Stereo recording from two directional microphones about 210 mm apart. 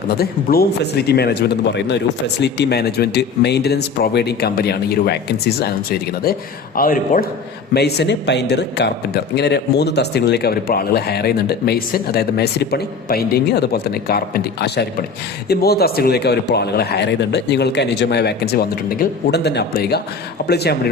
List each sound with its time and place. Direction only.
0.1 s a man's voice: 45° left (ahead or behind)
7.7 s a man's voice: 55° left (ahead or behind)